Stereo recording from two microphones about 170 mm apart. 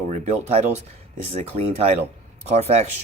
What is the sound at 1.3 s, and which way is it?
Speech, 40° right (ahead or behind).